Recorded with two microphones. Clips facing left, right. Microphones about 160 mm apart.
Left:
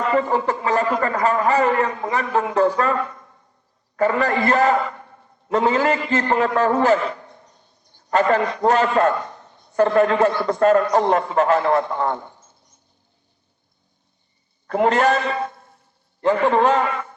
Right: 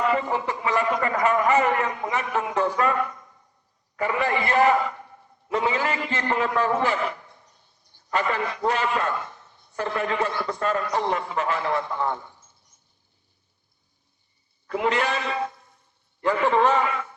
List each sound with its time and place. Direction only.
0.1 s a man's voice: 50° left (ahead or behind)
3.9 s a man's voice: 45° left (ahead or behind)
7.9 s a sound: 45° left (ahead or behind)
8.5 s a man's voice: 45° left (ahead or behind)
14.7 s a man's voice: 50° left (ahead or behind)
16.7 s music: 55° left (ahead or behind)